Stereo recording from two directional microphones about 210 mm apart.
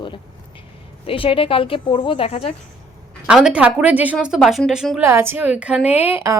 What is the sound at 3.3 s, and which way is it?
A woman's voice, 5° right (ahead or behind).